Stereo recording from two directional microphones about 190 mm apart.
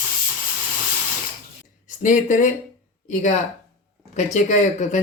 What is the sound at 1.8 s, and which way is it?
Speech, 40° left (ahead or behind).